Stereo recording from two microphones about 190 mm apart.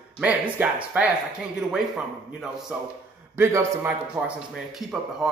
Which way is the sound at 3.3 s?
10° right (ahead or behind).